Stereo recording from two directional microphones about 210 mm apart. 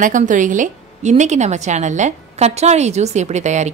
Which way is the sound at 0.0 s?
35° right (ahead or behind).